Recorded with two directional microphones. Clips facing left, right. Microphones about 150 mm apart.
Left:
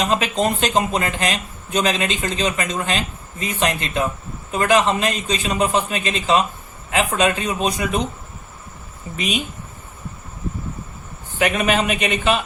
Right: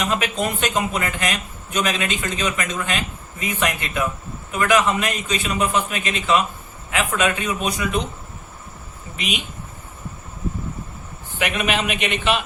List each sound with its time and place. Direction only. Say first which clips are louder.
0.0 s a man's voice: left 3 dB; 35° left (ahead or behind)
11.3 s a man's voice: left 4 dB; 40° left (ahead or behind)